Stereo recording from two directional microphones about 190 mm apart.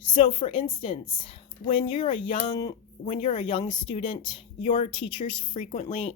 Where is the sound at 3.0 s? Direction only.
35° left (ahead or behind).